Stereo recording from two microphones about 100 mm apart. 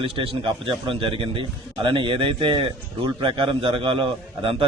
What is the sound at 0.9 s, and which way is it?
Speech, 60° right (ahead or behind).